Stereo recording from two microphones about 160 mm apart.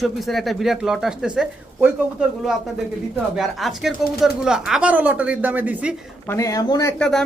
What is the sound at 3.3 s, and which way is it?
A man's voice, centre (ahead or behind).